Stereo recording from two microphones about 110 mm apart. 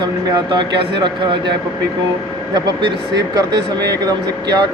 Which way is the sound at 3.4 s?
35° right (ahead or behind).